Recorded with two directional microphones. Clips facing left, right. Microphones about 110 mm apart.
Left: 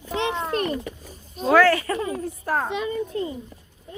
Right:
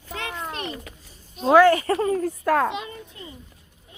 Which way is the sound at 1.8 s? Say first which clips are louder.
Right 4 dB; 40° right (ahead or behind).